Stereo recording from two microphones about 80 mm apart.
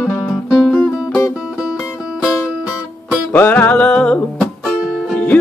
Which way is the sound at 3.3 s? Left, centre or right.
Left.